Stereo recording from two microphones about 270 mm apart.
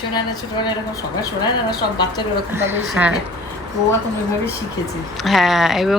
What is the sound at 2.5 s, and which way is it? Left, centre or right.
Speech, centre.